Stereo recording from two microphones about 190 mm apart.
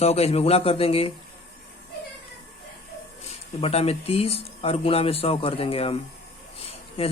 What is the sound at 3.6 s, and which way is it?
Speech, 30° left (ahead or behind).